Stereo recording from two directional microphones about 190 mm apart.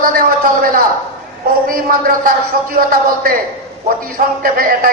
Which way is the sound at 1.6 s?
50° right (ahead or behind).